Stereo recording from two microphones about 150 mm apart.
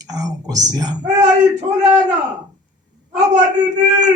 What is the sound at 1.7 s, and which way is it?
Speech, 50° right (ahead or behind).